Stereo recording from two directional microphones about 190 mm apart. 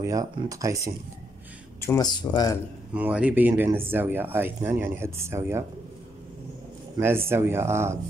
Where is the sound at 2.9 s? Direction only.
5° right (ahead or behind).